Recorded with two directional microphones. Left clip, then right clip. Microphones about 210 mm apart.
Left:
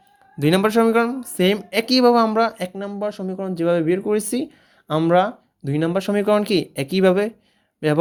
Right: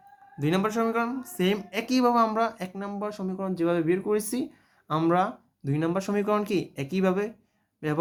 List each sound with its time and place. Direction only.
0.3 s speech: 40° left (ahead or behind)